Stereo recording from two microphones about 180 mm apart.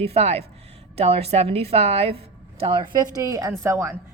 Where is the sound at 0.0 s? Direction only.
35° right (ahead or behind); by 3.9 s 15° right (ahead or behind).